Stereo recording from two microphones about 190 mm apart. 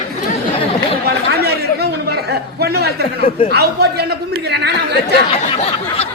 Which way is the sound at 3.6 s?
60° right (ahead or behind).